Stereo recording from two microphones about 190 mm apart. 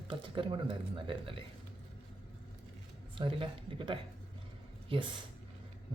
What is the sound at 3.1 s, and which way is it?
Speech, 25° right (ahead or behind).